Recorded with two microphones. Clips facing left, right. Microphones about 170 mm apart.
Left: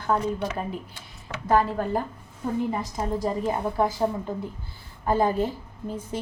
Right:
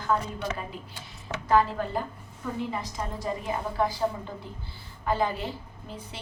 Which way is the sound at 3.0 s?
40° left (ahead or behind).